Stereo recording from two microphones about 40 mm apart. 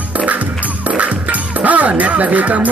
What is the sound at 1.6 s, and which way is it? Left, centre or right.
Speech, right.